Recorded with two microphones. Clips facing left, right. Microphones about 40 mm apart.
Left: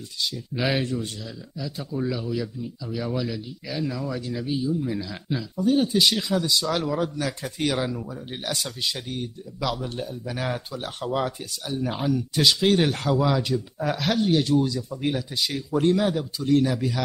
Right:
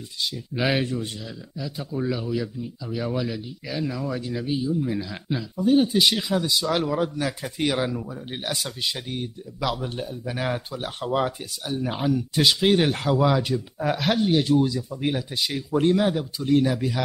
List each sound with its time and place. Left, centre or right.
0.2 s speech: centre